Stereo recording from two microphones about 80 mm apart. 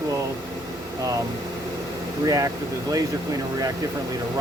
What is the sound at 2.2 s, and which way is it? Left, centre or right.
Speech, right.